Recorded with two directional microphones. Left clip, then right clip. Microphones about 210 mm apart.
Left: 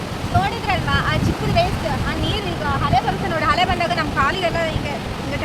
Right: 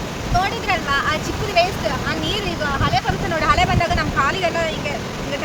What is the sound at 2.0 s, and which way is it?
Speech, 5° right (ahead or behind).